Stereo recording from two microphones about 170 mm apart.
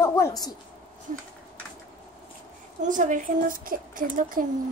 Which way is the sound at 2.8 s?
50° right (ahead or behind).